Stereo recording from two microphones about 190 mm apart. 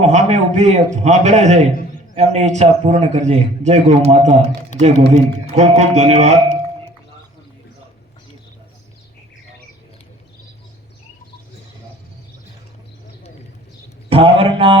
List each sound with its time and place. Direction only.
0.0 s a sound: 35° right (ahead or behind)
1.0 s a man's voice: 35° right (ahead or behind)
14.1 s a man's voice: 30° right (ahead or behind)